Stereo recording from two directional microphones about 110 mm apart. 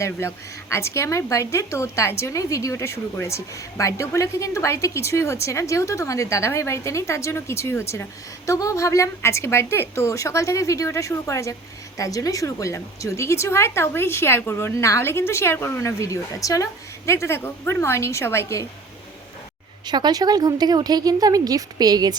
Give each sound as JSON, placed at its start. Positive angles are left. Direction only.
{"t": 0.0, "sound": "a woman's voice", "side_deg": 25}
{"t": 19.8, "sound": "speech", "side_deg": -40}